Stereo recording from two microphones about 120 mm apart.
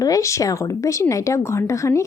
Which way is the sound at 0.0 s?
30° left (ahead or behind).